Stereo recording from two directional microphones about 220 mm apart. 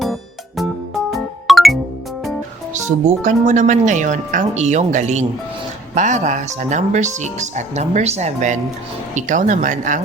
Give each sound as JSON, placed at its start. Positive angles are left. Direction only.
{"t": 0.0, "sound": "music", "side_deg": 0}
{"t": 2.9, "sound": "speech", "side_deg": -35}